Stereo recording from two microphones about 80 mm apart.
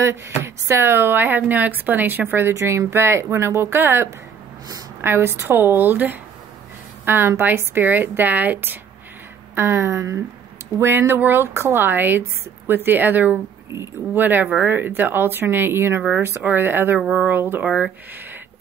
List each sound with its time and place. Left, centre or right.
0.0 s speech: right
10.8 s speech: right